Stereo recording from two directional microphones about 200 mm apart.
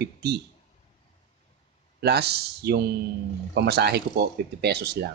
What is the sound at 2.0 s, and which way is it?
Speech, 55° right (ahead or behind).